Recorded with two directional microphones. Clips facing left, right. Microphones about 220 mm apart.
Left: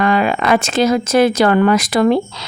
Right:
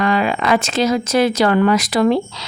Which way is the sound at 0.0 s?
50° left (ahead or behind).